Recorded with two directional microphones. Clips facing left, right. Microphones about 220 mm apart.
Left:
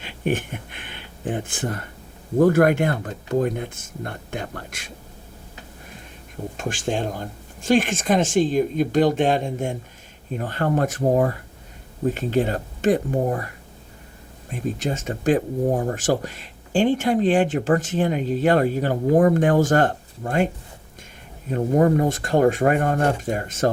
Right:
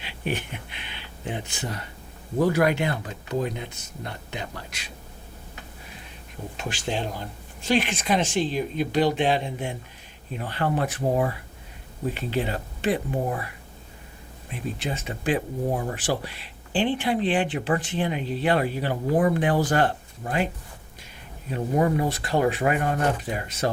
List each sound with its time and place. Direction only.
0.0 s speech: 50° left (ahead or behind)
6.6 s speech: 45° left (ahead or behind)
14.5 s speech: 45° left (ahead or behind)
21.5 s speech: 45° left (ahead or behind)